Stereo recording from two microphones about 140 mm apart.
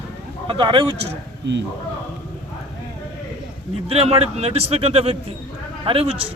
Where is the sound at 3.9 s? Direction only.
45° right (ahead or behind).